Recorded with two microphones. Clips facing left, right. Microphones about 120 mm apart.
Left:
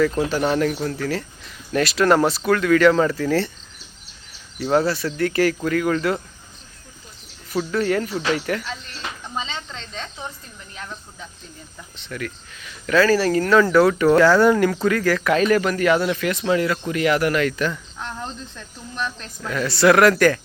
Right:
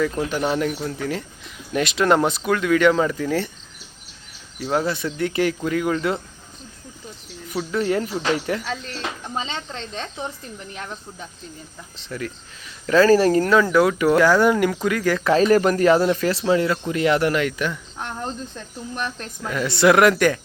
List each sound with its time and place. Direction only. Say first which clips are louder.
0.3 s speech: left 2 dB; 15° right (ahead or behind)
4.7 s speech: left 3 dB; 15° right (ahead or behind)
7.5 s speech: left 3 dB; centre (ahead or behind)
7.8 s speech: right 1 dB; 20° right (ahead or behind)
9.7 s speech: right 3 dB; 50° right (ahead or behind)
12.0 s speech: right 1 dB; 25° right (ahead or behind)
18.0 s speech: right 3 dB; 45° right (ahead or behind)
19.4 s speech: even; 15° right (ahead or behind)